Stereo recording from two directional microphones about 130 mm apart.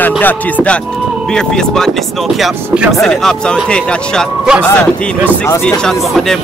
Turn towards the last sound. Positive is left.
turn(degrees=5)  # may be behind; listen again after turning